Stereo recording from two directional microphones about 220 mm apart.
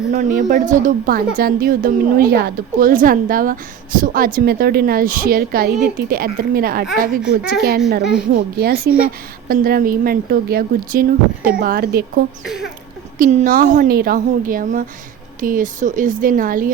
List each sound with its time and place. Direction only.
0.1 s a woman's voice: 35° right (ahead or behind)
7.2 s a child's voice: 5° right (ahead or behind)
8.5 s a woman's voice: 45° right (ahead or behind)